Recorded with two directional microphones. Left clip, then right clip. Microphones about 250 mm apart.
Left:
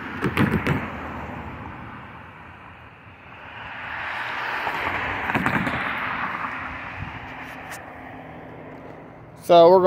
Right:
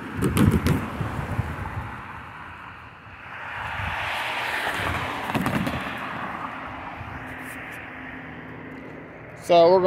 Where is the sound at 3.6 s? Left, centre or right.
Right; by 6.1 s centre.